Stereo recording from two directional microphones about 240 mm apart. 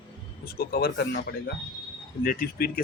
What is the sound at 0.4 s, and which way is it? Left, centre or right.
Speech, left.